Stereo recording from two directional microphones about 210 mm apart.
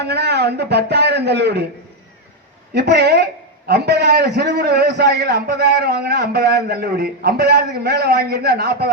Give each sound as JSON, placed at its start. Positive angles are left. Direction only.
{"t": 0.0, "sound": "a man's voice", "side_deg": -50}
{"t": 2.7, "sound": "a man's voice", "side_deg": -50}